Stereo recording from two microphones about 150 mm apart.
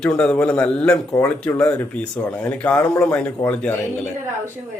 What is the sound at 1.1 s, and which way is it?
Speech, 20° left (ahead or behind).